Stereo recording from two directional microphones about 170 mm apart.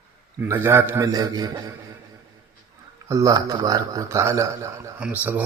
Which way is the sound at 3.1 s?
20° right (ahead or behind).